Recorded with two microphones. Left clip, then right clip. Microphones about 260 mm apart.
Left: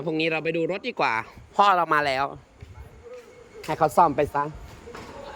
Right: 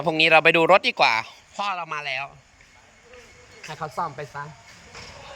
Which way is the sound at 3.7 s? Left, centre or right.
Left.